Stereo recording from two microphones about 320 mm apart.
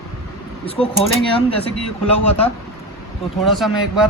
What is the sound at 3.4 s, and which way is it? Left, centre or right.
Speech, centre.